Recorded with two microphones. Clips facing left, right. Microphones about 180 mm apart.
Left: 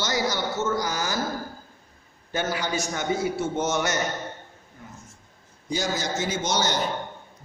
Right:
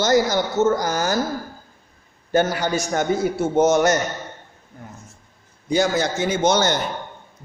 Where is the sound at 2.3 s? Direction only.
45° right (ahead or behind).